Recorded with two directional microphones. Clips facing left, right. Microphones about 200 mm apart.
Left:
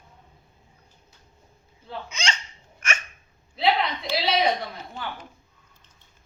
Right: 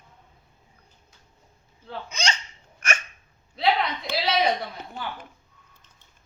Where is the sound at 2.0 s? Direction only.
35° right (ahead or behind).